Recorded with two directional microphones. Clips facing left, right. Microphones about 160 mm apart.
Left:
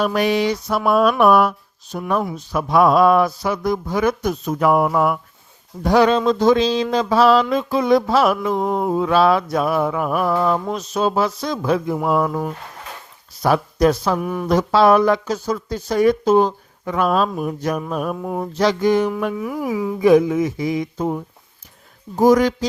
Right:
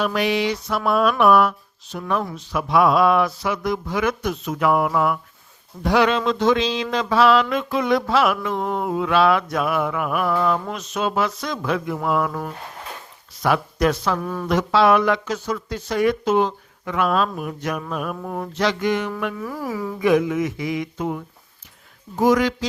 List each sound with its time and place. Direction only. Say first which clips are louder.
0.0 s a sound: left 3 dB; 45° left (ahead or behind)
1.2 s speech: left 2 dB; 40° left (ahead or behind)
4.9 s a sound: left 2 dB; 45° left (ahead or behind)
5.8 s speech: left 4 dB; 40° left (ahead or behind)
8.5 s mantra: left 4 dB; 5° left (ahead or behind)
8.8 s speech: left 2 dB; 35° left (ahead or behind)
13.4 s speech: left 4 dB; 35° left (ahead or behind)
14.2 s speech: left 4 dB; 15° left (ahead or behind)
14.4 s speech: left 3 dB; 40° left (ahead or behind)
18.2 s speech: left 4 dB; 15° left (ahead or behind)
18.5 s speech: left 5 dB; 40° left (ahead or behind)
19.4 s speech: left 5 dB; 15° left (ahead or behind)
20.0 s speech: left 5 dB; 35° left (ahead or behind)